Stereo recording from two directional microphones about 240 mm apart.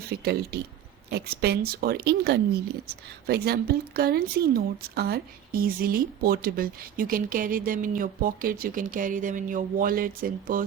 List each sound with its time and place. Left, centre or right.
0.1 s a woman's voice: right